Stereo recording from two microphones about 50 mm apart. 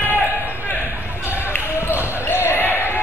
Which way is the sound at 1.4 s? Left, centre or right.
Left.